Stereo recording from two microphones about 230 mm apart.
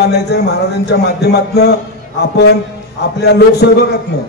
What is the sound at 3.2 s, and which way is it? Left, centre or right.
Speech, left.